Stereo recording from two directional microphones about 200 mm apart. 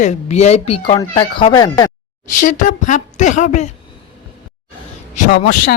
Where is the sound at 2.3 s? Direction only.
40° left (ahead or behind).